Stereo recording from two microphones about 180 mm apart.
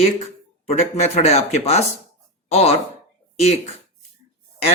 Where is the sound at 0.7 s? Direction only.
35° left (ahead or behind).